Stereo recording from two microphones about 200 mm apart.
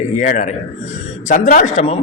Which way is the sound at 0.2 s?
40° left (ahead or behind).